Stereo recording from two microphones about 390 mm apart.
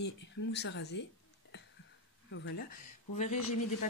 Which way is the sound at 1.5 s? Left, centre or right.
Left.